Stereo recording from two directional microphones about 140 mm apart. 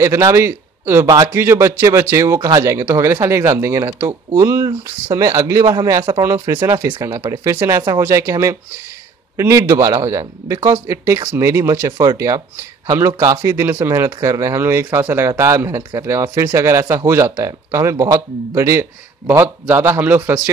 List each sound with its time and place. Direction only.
0.0 s speech: 20° right (ahead or behind)